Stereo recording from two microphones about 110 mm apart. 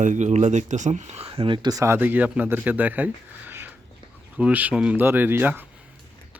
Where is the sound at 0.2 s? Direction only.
90° right; by 1.8 s 40° right (ahead or behind).